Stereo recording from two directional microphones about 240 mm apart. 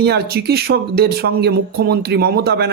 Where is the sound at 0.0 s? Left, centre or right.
Right.